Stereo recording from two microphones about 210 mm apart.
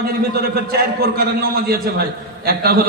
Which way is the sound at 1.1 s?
45° right (ahead or behind).